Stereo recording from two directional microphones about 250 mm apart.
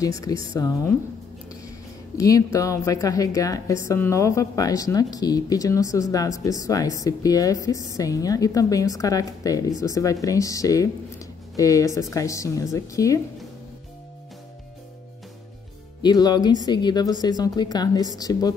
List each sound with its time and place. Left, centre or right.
0.5 s a woman's voice: centre
2.1 s a woman's voice: centre
16.0 s a woman's voice: centre